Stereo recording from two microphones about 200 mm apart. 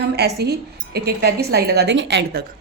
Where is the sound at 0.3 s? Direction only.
55° right (ahead or behind).